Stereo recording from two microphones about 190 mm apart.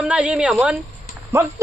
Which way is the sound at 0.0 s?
5° right (ahead or behind).